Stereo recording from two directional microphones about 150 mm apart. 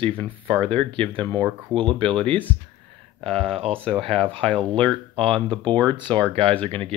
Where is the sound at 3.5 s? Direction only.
40° right (ahead or behind).